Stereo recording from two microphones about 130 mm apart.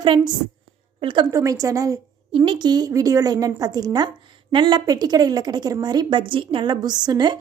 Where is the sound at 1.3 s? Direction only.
25° right (ahead or behind).